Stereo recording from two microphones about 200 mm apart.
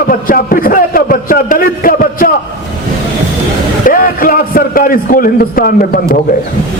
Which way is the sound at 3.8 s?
45° left (ahead or behind).